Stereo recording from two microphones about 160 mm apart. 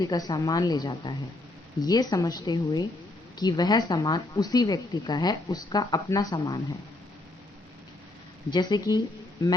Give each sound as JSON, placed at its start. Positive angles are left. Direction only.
{"t": 0.0, "sound": "speech", "side_deg": 25}
{"t": 8.4, "sound": "speech", "side_deg": 25}